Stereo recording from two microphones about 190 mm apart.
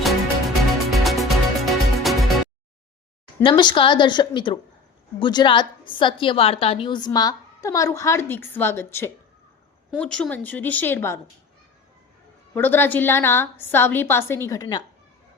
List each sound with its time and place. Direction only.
0.0 s music: centre (ahead or behind)
3.4 s a woman's voice: 25° left (ahead or behind)
12.5 s a woman's voice: 10° left (ahead or behind)